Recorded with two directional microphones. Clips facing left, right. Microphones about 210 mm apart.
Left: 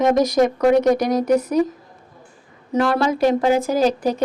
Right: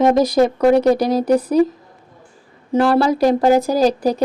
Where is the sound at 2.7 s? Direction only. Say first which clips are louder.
Right 4 dB; 35° right (ahead or behind).